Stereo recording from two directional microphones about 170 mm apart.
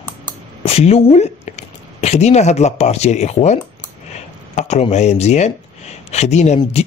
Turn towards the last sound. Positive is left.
turn(degrees=40)  # may be behind; listen again after turning